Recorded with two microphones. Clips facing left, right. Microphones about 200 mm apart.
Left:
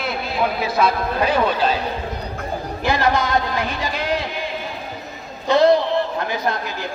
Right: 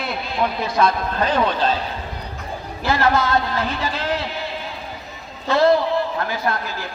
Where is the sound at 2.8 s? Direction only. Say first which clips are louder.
Right 1 dB; 15° left (ahead or behind).